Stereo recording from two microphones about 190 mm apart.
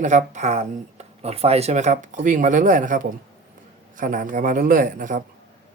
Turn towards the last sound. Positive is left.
turn(degrees=-45)  # may be behind; listen again after turning